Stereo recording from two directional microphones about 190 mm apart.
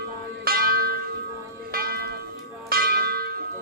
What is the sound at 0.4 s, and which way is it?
Church bell, 50° right (ahead or behind).